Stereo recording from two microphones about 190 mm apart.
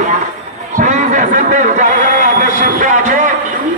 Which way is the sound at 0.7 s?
40° right (ahead or behind).